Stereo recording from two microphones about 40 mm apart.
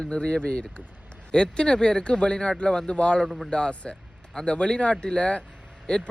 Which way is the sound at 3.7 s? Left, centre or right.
Left.